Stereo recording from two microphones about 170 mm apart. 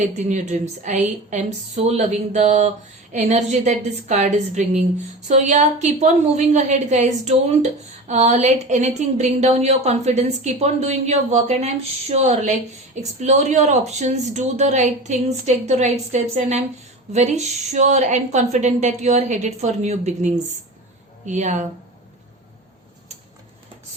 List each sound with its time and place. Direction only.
0.0 s a woman's voice: 45° right (ahead or behind)